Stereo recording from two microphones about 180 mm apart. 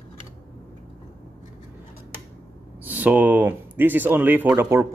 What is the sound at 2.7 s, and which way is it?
Speech, 10° right (ahead or behind).